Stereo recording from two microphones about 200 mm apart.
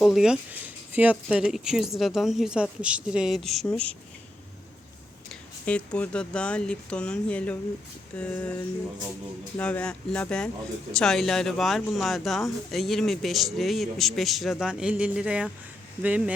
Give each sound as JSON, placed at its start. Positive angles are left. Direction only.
{"t": 0.0, "sound": "speech", "side_deg": -5}
{"t": 5.3, "sound": "speech", "side_deg": 5}
{"t": 8.1, "sound": "a sound", "side_deg": 5}
{"t": 9.6, "sound": "speech", "side_deg": 5}